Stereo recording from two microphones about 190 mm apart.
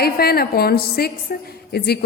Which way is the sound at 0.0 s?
55° left (ahead or behind).